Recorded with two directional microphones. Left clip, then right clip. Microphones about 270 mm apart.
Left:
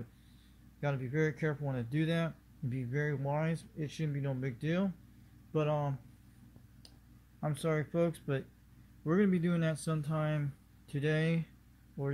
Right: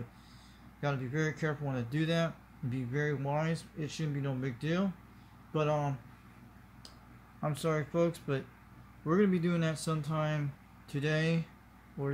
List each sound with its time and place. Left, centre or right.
0.7 s speech: centre
7.3 s speech: centre